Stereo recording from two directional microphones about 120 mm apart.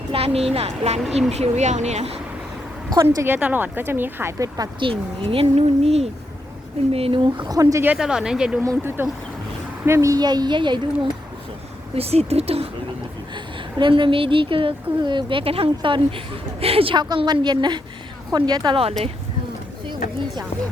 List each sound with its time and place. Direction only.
0.1 s speech: 55° right (ahead or behind)
1.3 s speech: 70° right (ahead or behind)
3.2 s a woman's voice: 15° right (ahead or behind)
4.8 s a woman's voice: 45° right (ahead or behind)
6.9 s speech: 50° right (ahead or behind); by 7.9 s 25° right (ahead or behind)
7.9 s speech: 5° right (ahead or behind)
8.6 s speech: 25° right (ahead or behind); by 11.1 s 40° right (ahead or behind)
11.9 s speech: 55° right (ahead or behind)
13.3 s a woman's voice: 40° right (ahead or behind)